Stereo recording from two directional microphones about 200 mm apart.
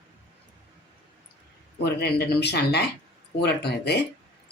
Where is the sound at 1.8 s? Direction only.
55° left (ahead or behind).